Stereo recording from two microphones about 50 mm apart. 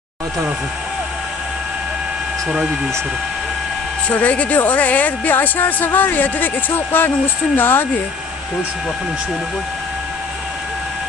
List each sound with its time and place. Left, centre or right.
4.1 s speech: left